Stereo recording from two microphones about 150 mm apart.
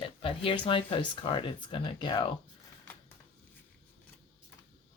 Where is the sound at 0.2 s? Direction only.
35° left (ahead or behind).